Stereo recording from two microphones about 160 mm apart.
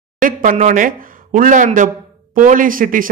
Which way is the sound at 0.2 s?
50° right (ahead or behind).